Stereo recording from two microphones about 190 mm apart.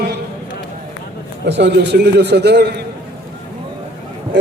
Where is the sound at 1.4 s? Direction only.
65° right (ahead or behind).